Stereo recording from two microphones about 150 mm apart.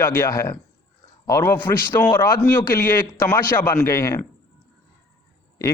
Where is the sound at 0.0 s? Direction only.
20° left (ahead or behind).